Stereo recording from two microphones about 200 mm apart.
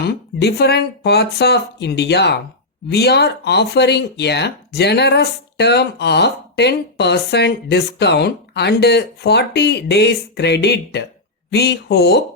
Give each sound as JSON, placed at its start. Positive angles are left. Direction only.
{"t": 0.1, "sound": "speech", "side_deg": 55}